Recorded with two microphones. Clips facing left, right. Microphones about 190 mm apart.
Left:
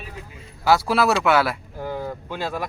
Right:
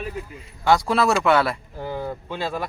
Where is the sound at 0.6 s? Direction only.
5° left (ahead or behind).